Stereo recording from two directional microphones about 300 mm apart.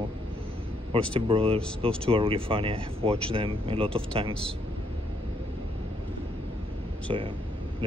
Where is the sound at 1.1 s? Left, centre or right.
Centre.